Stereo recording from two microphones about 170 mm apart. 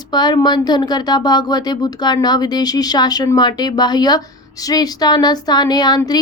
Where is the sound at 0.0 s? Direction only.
25° left (ahead or behind).